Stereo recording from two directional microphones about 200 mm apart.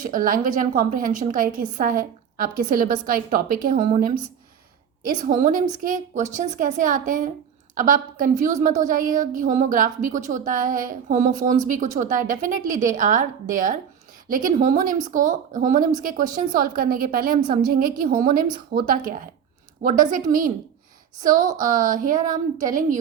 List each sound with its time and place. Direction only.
0.0 s a woman's voice: 40° right (ahead or behind)
21.2 s a woman's voice: 40° right (ahead or behind)